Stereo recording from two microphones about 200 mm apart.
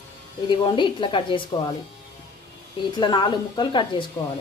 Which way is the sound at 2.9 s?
20° left (ahead or behind).